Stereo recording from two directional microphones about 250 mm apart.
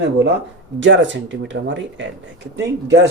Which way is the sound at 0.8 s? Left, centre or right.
Right.